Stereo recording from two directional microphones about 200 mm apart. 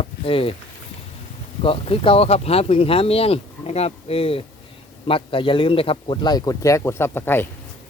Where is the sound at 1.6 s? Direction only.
25° left (ahead or behind).